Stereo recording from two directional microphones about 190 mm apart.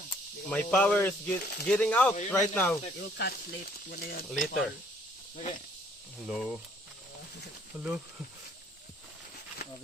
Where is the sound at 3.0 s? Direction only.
60° left (ahead or behind).